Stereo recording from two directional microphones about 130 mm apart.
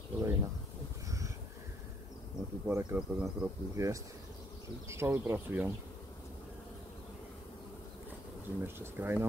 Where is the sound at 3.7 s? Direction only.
25° right (ahead or behind).